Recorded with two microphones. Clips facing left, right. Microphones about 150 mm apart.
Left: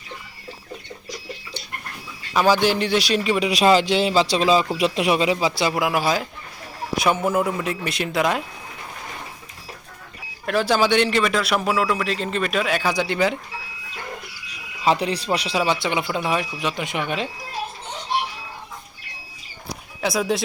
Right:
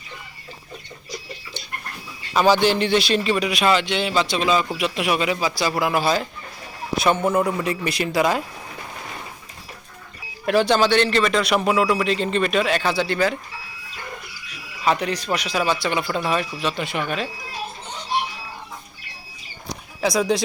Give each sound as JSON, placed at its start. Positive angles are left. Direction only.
{"t": 2.3, "sound": "speech", "side_deg": 5}
{"t": 3.4, "sound": "speech", "side_deg": 35}
{"t": 5.8, "sound": "speech", "side_deg": 10}
{"t": 10.4, "sound": "speech", "side_deg": 0}
{"t": 14.8, "sound": "speech", "side_deg": 30}
{"t": 19.6, "sound": "a sound", "side_deg": 5}